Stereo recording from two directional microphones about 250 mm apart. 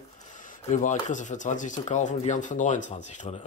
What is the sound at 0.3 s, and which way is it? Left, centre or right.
A man's voice, left.